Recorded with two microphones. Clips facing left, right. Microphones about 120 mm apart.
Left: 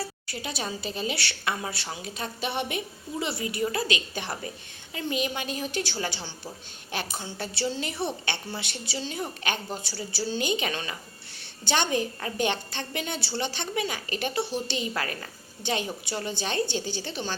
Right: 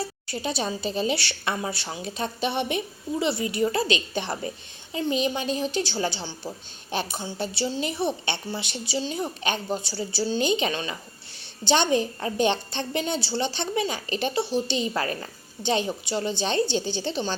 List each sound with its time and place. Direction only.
0.0 s a woman's voice: 25° right (ahead or behind)